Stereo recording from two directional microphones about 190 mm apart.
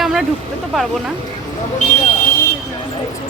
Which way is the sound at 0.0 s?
Centre (ahead or behind).